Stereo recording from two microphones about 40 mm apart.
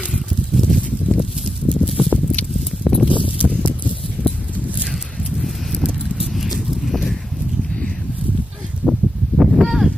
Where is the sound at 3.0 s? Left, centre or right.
Right.